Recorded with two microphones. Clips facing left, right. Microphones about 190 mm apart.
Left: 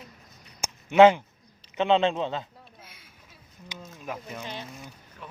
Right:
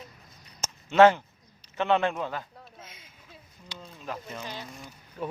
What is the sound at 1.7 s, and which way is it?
Speech, 20° left (ahead or behind).